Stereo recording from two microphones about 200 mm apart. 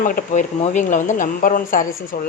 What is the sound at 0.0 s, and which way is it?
Speech, 40° left (ahead or behind).